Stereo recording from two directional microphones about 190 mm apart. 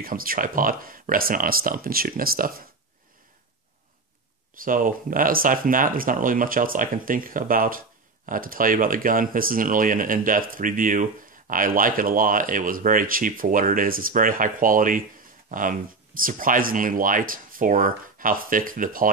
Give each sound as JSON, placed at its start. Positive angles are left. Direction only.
{"t": 0.0, "sound": "speech", "side_deg": -50}
{"t": 4.6, "sound": "speech", "side_deg": -45}